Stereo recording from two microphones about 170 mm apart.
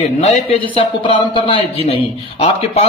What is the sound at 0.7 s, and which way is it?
A man's voice, 30° left (ahead or behind).